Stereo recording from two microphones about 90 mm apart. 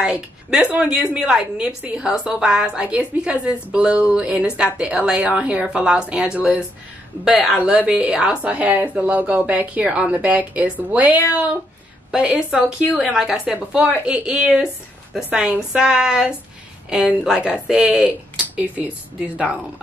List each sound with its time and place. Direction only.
0.0 s a woman's voice: 10° right (ahead or behind)